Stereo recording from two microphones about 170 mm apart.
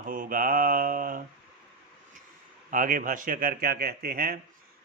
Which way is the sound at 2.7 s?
55° right (ahead or behind).